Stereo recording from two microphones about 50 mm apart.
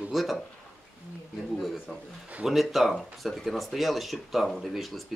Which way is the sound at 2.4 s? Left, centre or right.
Centre.